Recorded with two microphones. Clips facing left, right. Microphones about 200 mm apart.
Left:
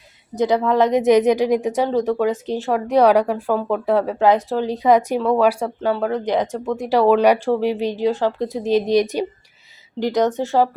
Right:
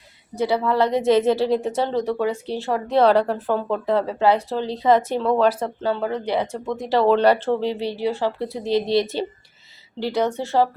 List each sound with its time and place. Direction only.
0.3 s a woman's voice: 15° left (ahead or behind)